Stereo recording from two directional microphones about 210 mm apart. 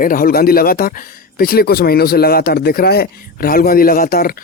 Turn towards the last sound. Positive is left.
turn(degrees=45)  # may be behind; listen again after turning